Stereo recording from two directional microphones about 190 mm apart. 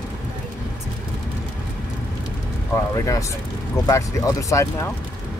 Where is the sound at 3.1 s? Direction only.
15° left (ahead or behind).